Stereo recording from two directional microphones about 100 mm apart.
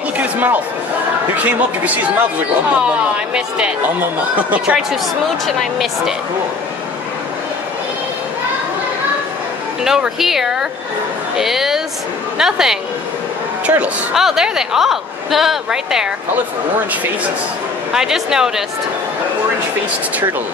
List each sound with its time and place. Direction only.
0.2 s speech: 15° right (ahead or behind)
3.3 s speech: 10° right (ahead or behind)
5.6 s a woman's voice: centre (ahead or behind)
9.8 s a woman's voice: 5° right (ahead or behind)
17.9 s a woman's voice: 5° right (ahead or behind)